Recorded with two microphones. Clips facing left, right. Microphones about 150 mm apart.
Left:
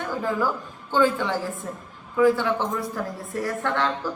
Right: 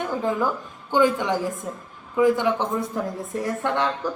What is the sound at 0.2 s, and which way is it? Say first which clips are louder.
A woman's voice: left 1 dB; 20° right (ahead or behind).